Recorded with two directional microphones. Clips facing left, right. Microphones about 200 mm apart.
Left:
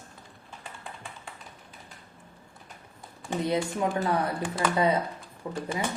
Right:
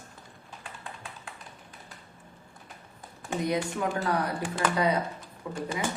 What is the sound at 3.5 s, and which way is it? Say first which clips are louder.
Speech: left 2 dB; 25° left (ahead or behind).